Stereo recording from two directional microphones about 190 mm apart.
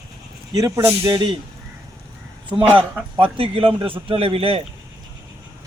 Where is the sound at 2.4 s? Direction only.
25° right (ahead or behind).